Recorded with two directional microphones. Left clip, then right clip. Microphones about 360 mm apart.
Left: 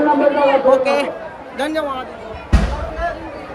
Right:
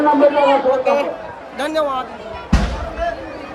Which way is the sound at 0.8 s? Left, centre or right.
Left.